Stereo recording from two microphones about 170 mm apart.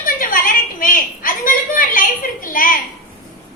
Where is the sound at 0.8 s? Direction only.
55° left (ahead or behind).